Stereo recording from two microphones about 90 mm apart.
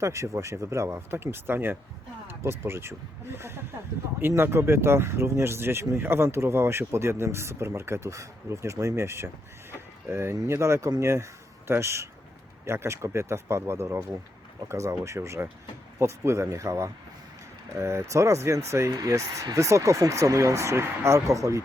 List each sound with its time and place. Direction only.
0.0 s speech: 35° right (ahead or behind)